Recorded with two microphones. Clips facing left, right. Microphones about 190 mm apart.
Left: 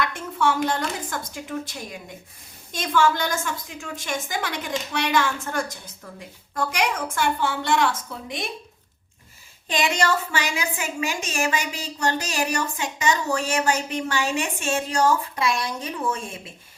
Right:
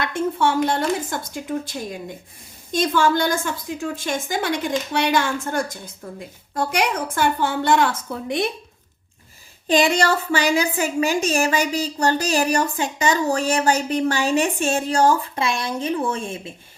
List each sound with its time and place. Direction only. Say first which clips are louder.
0.0 s a woman's voice: right 3 dB; 30° right (ahead or behind)
8.1 s a woman's voice: right 7 dB; 55° right (ahead or behind)
9.6 s a woman's voice: right 5 dB; 35° right (ahead or behind)